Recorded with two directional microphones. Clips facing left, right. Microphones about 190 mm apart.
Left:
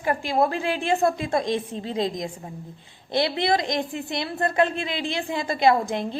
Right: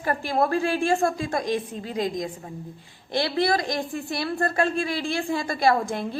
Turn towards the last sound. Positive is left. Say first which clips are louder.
# left 2 dB
turn(degrees=20)  # may be behind; listen again after turning